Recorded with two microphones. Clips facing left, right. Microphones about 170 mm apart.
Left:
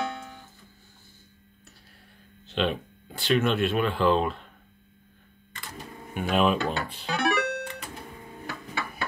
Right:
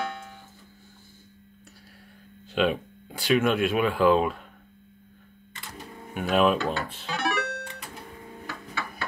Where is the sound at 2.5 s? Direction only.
5° right (ahead or behind).